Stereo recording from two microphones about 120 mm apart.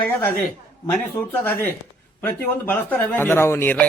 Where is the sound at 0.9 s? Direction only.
15° left (ahead or behind).